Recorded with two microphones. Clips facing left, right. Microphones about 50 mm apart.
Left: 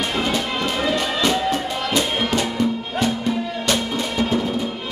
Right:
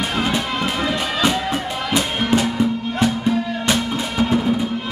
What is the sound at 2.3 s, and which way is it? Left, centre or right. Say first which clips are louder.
Music: right 6 dB; right.